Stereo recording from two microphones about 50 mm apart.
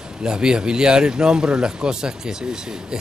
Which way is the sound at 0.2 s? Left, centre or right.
Centre.